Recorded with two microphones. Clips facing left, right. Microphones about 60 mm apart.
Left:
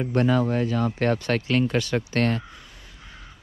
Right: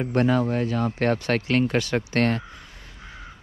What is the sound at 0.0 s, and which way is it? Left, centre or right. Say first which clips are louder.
Speech: even; right.